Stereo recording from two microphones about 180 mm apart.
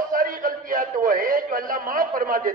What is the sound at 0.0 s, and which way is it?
A man's voice, 50° right (ahead or behind).